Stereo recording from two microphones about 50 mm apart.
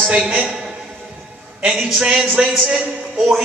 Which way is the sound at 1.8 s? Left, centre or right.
Centre.